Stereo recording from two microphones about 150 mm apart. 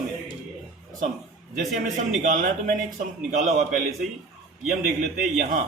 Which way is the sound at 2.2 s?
65° right (ahead or behind).